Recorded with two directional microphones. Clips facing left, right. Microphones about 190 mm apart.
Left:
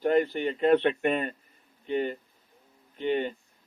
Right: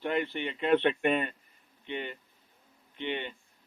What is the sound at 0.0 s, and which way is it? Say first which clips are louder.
Speech: left 7 dB; 40° left (ahead or behind).